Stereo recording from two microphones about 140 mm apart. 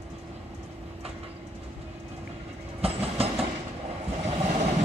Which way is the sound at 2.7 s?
45° right (ahead or behind).